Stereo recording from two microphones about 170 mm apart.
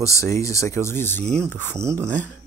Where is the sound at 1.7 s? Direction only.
15° right (ahead or behind).